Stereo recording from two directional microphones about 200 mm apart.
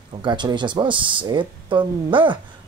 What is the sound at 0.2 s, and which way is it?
Speech, 25° right (ahead or behind).